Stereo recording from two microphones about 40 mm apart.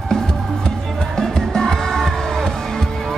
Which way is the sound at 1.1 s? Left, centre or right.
Centre.